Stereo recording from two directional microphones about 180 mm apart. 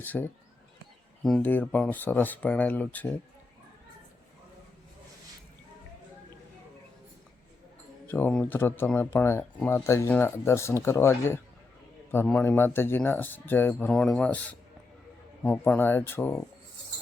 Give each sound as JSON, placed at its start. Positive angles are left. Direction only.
{"t": 0.0, "sound": "speech", "side_deg": 10}
{"t": 8.0, "sound": "speech", "side_deg": 10}